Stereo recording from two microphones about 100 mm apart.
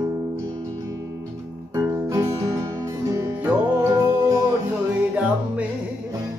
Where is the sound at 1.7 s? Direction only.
30° right (ahead or behind).